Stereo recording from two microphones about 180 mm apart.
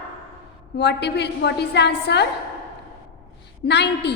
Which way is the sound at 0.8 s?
70° left (ahead or behind).